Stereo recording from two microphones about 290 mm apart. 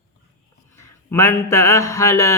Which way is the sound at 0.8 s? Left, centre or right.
Centre.